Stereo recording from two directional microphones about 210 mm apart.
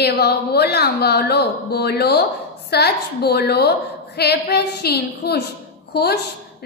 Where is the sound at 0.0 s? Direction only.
50° left (ahead or behind).